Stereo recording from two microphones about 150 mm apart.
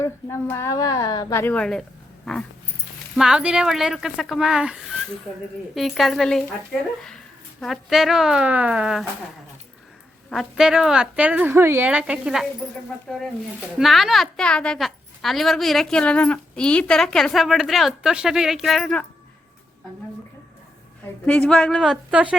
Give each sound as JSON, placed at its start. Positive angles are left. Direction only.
{"t": 0.0, "sound": "a woman's voice", "side_deg": 15}
{"t": 3.2, "sound": "a woman's voice", "side_deg": -5}
{"t": 10.2, "sound": "a woman's voice", "side_deg": 0}
{"t": 13.6, "sound": "a woman's voice", "side_deg": -5}
{"t": 21.2, "sound": "a woman's voice", "side_deg": 10}